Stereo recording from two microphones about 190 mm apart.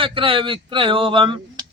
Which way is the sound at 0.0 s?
30° right (ahead or behind).